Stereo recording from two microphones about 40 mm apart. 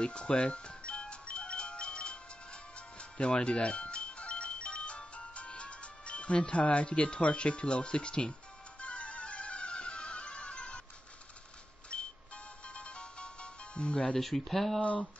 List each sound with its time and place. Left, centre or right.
0.0 s music: left
11.9 s music: left
14.1 s speech: centre